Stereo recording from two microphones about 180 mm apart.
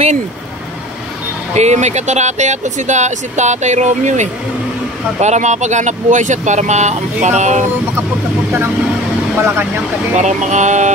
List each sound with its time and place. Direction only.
1.5 s speech: 40° right (ahead or behind)
9.4 s speech: 15° right (ahead or behind)
10.1 s speech: 40° right (ahead or behind)